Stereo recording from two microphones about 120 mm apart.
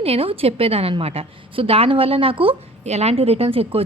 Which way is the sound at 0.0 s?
55° right (ahead or behind).